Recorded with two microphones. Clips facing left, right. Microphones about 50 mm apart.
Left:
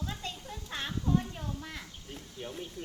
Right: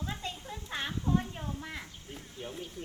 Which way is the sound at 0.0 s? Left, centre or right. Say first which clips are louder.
Right 1 dB; right.